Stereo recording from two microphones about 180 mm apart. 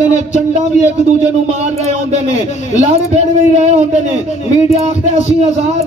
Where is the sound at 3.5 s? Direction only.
35° right (ahead or behind).